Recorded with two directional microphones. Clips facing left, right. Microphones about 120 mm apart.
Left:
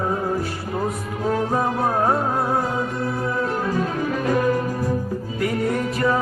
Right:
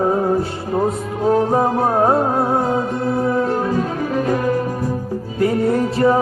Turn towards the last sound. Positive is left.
turn(degrees=-30)  # may be behind; listen again after turning